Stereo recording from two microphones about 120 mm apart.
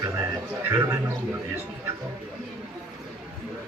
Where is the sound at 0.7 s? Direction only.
20° right (ahead or behind).